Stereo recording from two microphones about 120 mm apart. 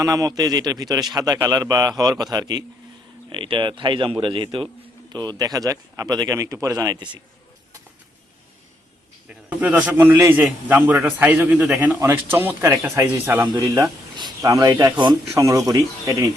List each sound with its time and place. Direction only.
0.0 s a man's voice: 30° right (ahead or behind)
3.2 s a man's voice: 45° right (ahead or behind)
9.3 s a man's voice: 10° right (ahead or behind)
13.5 s a man's voice: 30° right (ahead or behind)